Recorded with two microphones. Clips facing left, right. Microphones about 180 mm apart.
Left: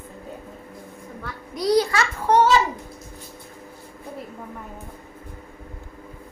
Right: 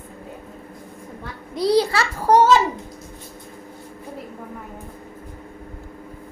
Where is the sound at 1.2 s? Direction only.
30° right (ahead or behind).